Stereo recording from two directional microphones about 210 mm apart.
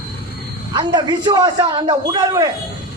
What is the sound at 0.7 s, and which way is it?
A man's voice, 20° right (ahead or behind).